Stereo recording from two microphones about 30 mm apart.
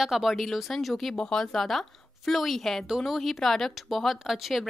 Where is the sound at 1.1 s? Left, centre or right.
Centre.